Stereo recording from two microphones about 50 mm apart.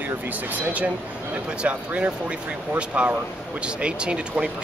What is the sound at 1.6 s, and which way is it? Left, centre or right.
Speech, right.